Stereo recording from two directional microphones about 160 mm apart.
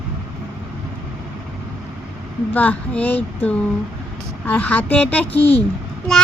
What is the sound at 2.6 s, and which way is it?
A child's voice, 10° left (ahead or behind).